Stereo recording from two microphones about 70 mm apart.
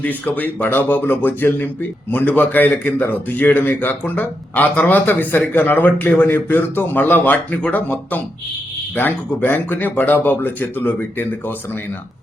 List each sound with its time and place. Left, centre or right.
0.0 s speech: left